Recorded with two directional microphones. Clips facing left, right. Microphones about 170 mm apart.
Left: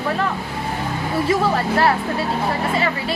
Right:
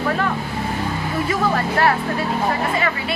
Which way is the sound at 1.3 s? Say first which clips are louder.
Left 2 dB; 30° left (ahead or behind).